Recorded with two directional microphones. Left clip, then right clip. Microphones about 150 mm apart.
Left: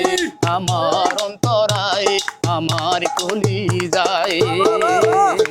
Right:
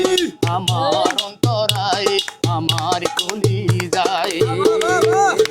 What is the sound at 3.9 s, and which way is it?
Music, 45° left (ahead or behind).